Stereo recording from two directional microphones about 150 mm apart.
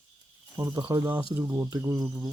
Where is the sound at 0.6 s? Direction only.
25° right (ahead or behind).